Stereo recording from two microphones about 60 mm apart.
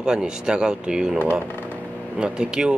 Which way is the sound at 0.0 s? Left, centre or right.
Centre.